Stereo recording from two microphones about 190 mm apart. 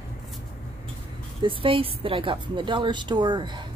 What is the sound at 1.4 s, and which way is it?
A woman's voice, 25° right (ahead or behind).